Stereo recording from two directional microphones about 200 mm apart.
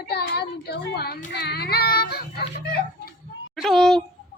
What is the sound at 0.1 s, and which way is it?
A child's voice, 50° left (ahead or behind).